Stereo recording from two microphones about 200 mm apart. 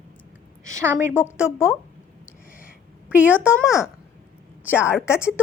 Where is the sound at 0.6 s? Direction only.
15° right (ahead or behind).